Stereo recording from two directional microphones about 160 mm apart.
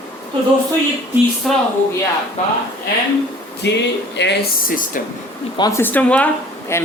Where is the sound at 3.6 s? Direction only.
90° left.